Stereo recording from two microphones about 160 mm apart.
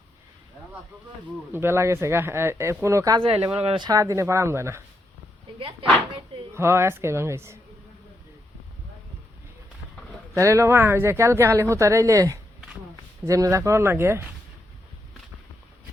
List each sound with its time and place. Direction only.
1.5 s speech: 15° right (ahead or behind)
3.6 s speech: 40° right (ahead or behind)
3.8 s speech: 20° right (ahead or behind)
6.5 s speech: 15° right (ahead or behind)
10.3 s speech: 20° right (ahead or behind)